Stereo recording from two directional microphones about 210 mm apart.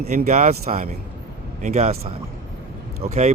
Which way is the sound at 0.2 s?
35° right (ahead or behind).